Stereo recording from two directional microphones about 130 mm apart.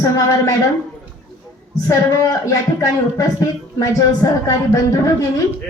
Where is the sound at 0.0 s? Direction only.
25° left (ahead or behind).